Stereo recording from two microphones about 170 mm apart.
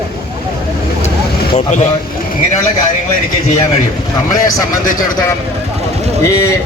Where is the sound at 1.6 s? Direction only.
45° left (ahead or behind).